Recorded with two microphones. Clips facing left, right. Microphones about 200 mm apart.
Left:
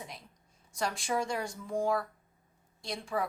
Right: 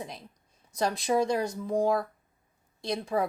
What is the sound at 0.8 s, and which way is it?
Speech, 40° right (ahead or behind).